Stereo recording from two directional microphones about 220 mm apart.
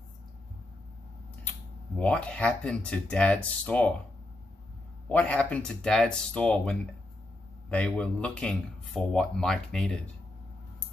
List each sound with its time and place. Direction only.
2.0 s speech: 5° left (ahead or behind)
5.0 s speech: 5° left (ahead or behind)